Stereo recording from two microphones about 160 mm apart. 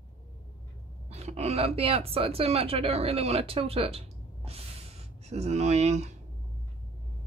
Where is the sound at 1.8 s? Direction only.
40° right (ahead or behind).